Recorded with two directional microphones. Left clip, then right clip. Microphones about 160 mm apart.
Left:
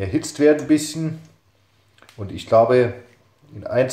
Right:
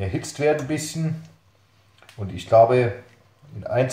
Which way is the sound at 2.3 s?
45° left (ahead or behind).